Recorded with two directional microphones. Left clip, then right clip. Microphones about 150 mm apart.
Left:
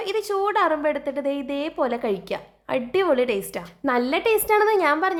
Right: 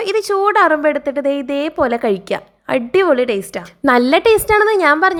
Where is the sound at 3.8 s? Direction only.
45° right (ahead or behind).